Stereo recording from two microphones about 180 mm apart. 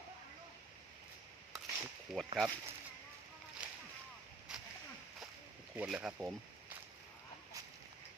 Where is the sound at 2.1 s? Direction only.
Centre (ahead or behind).